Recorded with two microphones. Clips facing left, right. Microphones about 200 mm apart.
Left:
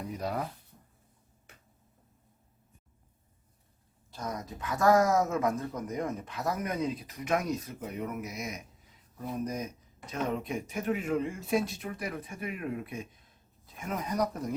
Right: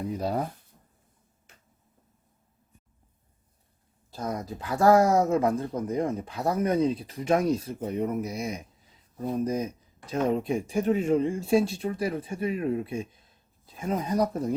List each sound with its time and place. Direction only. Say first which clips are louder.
0.2 s speech: right 4 dB; 30° right (ahead or behind)
4.1 s speech: right 5 dB; 30° right (ahead or behind)